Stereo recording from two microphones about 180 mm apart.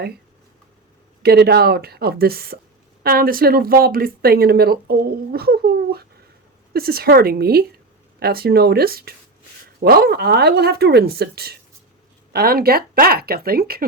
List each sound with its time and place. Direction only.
1.2 s speech: 65° right (ahead or behind)